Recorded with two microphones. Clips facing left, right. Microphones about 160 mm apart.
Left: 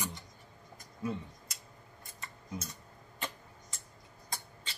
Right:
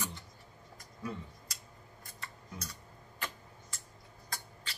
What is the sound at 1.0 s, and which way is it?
Speech, 25° left (ahead or behind).